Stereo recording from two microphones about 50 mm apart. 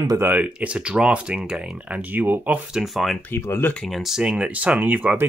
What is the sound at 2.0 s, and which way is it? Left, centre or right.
Speech, right.